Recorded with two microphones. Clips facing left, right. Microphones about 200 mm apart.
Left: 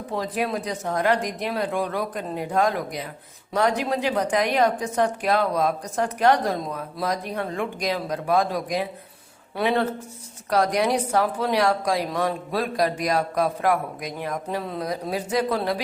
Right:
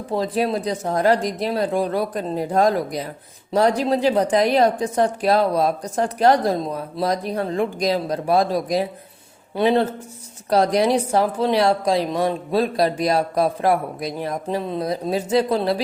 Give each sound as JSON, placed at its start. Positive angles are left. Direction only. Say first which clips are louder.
{"t": 0.1, "sound": "a woman's voice", "louder": "right 5 dB", "side_deg": -30}